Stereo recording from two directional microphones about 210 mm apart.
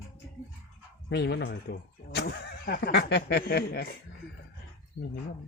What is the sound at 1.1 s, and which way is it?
Speech, 55° left (ahead or behind).